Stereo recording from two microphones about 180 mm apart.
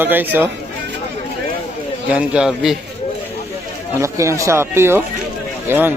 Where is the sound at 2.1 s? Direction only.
5° right (ahead or behind).